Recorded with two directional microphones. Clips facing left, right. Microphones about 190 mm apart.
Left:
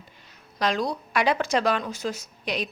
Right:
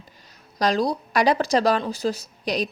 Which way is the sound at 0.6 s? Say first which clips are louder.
Right 4 dB; 35° right (ahead or behind).